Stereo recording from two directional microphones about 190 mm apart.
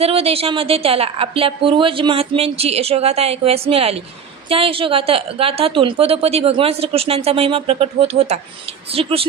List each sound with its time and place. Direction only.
0.0 s a woman's voice: 30° right (ahead or behind)